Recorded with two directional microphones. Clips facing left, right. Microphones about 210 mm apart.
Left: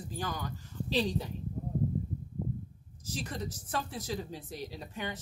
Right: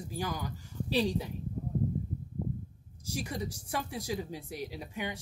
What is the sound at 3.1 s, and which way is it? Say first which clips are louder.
Speech: right 2 dB; 10° right (ahead or behind).